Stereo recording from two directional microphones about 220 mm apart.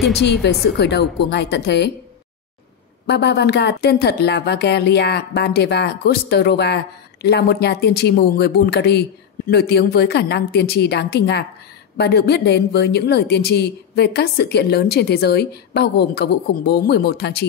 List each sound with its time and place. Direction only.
0.2 s a woman's voice: 50° left (ahead or behind)
3.1 s a woman's voice: 50° left (ahead or behind)